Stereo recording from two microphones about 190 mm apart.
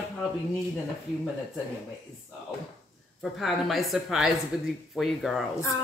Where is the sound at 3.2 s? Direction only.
Centre (ahead or behind).